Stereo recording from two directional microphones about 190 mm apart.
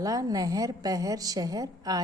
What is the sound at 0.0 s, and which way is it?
A woman's voice, 20° right (ahead or behind).